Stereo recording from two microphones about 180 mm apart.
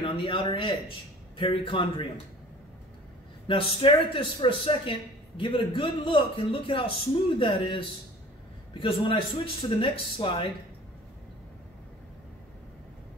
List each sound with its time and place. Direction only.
0.0 s a man's voice: 30° left (ahead or behind)
3.4 s a man's voice: 30° left (ahead or behind)